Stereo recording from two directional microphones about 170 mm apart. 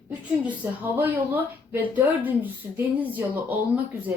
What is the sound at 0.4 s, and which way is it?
Speech, 10° right (ahead or behind).